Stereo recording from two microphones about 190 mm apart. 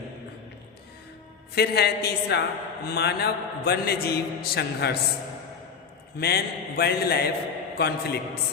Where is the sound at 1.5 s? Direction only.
55° left (ahead or behind).